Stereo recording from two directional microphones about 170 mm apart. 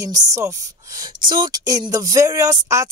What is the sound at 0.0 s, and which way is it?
A woman's voice, 20° right (ahead or behind).